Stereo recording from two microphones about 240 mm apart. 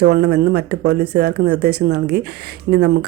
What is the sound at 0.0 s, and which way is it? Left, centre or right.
Speech, right.